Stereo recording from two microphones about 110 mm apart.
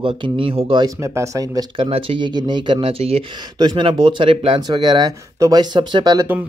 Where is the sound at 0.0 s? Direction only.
50° right (ahead or behind).